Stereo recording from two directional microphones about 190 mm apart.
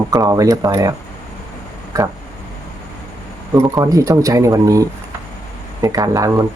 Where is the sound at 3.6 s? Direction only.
15° right (ahead or behind).